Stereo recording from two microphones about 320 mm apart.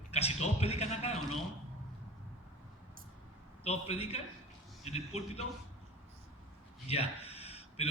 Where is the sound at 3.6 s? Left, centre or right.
Centre.